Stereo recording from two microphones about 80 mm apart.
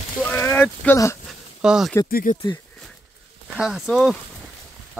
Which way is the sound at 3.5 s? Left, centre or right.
Centre.